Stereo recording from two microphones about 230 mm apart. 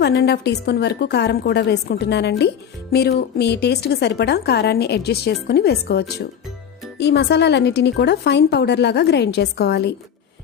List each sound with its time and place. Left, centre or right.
0.0 s a woman's voice: left